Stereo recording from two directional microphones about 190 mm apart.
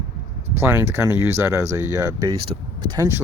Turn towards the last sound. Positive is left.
turn(degrees=-25)  # may be behind; listen again after turning